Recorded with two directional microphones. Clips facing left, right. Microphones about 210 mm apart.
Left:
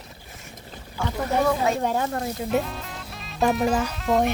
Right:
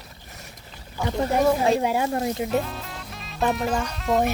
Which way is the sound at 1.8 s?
10° right (ahead or behind).